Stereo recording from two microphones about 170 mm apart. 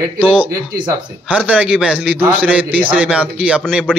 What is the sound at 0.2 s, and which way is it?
A man's voice, 5° right (ahead or behind).